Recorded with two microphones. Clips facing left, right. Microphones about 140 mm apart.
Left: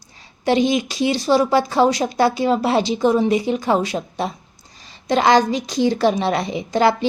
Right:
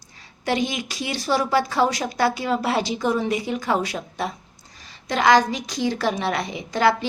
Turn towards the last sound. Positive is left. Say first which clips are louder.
# left 3 dB
turn(degrees=25)  # may be behind; listen again after turning